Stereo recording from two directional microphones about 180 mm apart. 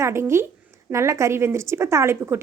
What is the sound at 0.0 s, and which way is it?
Speech, 15° right (ahead or behind).